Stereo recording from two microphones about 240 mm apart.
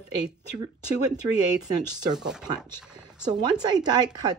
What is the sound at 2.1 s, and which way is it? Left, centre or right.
Speech, centre.